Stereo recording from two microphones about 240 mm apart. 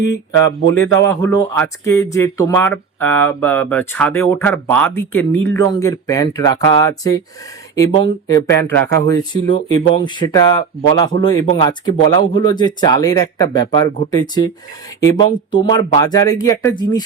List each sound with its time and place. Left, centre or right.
0.7 s speech: centre
8.3 s speech: centre